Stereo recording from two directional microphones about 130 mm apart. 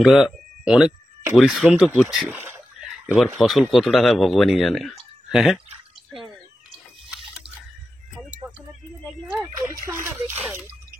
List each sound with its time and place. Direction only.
0.0 s speech: 5° right (ahead or behind)
2.3 s rowboat: 15° right (ahead or behind)
2.8 s a sound: 5° right (ahead or behind)
3.3 s speech: centre (ahead or behind)
9.8 s speech: 20° right (ahead or behind)